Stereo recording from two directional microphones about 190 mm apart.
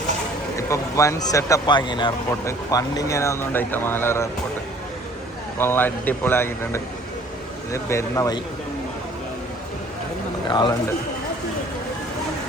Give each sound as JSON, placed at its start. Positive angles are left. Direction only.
{"t": 0.5, "sound": "speech", "side_deg": 15}
{"t": 5.5, "sound": "speech", "side_deg": 10}
{"t": 10.5, "sound": "speech", "side_deg": 20}